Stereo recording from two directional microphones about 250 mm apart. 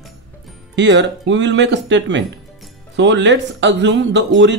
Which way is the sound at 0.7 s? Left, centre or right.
Right.